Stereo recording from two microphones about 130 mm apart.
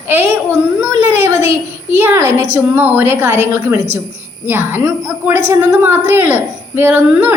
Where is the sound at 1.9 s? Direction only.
15° right (ahead or behind).